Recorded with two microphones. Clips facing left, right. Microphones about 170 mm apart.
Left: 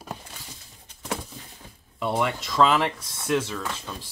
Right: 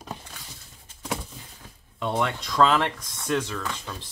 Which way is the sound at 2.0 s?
10° left (ahead or behind).